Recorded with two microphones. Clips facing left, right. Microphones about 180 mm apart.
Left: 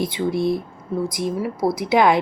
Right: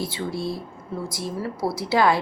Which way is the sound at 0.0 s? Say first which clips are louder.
Left 7 dB; 20° left (ahead or behind).